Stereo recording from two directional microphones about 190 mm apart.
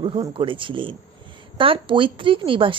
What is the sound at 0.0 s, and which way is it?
Speech, 30° right (ahead or behind).